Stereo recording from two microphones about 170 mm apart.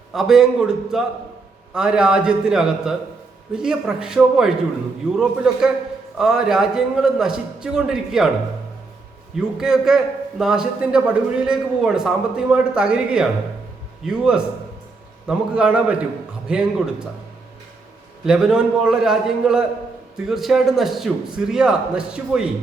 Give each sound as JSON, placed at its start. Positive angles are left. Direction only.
{"t": 0.1, "sound": "a man's voice", "side_deg": 0}
{"t": 9.6, "sound": "a man's voice", "side_deg": -5}
{"t": 18.3, "sound": "a man's voice", "side_deg": 0}